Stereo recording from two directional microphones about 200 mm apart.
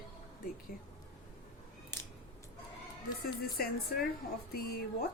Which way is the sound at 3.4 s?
50° left (ahead or behind).